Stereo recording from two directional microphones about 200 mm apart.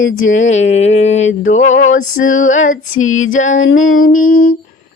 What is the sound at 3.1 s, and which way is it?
Music, 90° left.